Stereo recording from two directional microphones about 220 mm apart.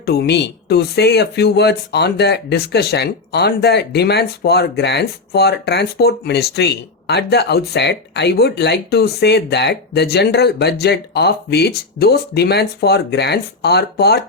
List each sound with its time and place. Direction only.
0.0 s speech: 45° left (ahead or behind)